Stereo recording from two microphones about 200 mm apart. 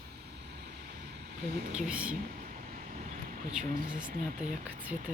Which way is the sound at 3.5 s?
5° right (ahead or behind).